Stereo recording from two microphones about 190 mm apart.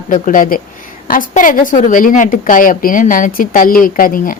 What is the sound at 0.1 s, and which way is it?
A woman's voice, 45° left (ahead or behind).